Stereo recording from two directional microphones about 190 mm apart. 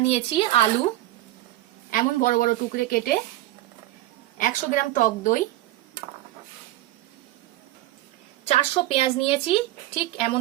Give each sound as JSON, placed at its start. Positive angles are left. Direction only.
{"t": 0.1, "sound": "a woman's voice", "side_deg": 30}
{"t": 1.9, "sound": "a woman's voice", "side_deg": 45}
{"t": 4.4, "sound": "a woman's voice", "side_deg": 45}
{"t": 8.4, "sound": "a woman's voice", "side_deg": 30}